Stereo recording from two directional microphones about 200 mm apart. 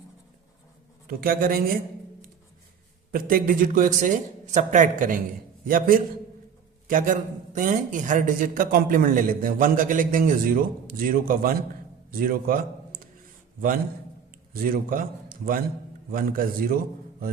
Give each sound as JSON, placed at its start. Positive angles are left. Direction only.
{"t": 1.0, "sound": "speech", "side_deg": -45}
{"t": 3.1, "sound": "a man's voice", "side_deg": -45}
{"t": 14.5, "sound": "a man's voice", "side_deg": -45}